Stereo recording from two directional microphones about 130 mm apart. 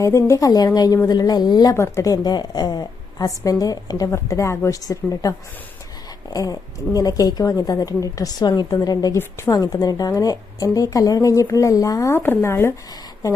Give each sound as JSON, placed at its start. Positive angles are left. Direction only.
{"t": 0.0, "sound": "a woman's voice", "side_deg": 25}
{"t": 6.3, "sound": "a woman's voice", "side_deg": 25}